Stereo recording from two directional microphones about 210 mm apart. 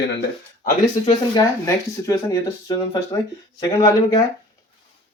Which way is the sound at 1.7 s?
15° left (ahead or behind).